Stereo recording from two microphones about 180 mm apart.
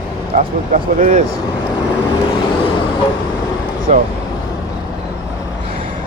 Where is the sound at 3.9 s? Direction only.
40° right (ahead or behind).